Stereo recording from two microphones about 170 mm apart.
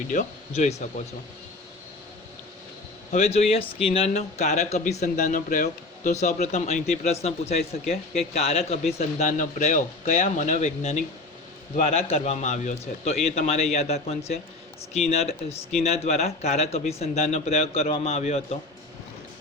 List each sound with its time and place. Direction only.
0.1 s speech: 45° left (ahead or behind)
3.1 s a man's voice: 40° left (ahead or behind)
5.1 s a man's voice: 55° left (ahead or behind); by 18.4 s 40° left (ahead or behind)